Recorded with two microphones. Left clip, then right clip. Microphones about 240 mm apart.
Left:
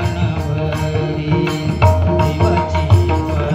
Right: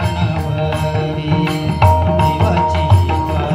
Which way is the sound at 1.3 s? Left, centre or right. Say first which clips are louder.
Even; right.